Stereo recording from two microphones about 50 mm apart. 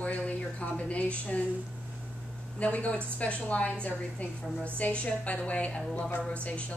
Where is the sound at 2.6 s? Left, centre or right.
Left.